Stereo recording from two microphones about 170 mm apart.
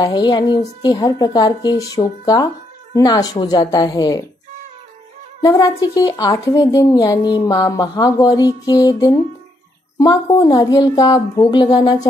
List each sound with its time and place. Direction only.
0.0 s a woman's voice: 25° left (ahead or behind)
5.4 s a woman's voice: 20° left (ahead or behind)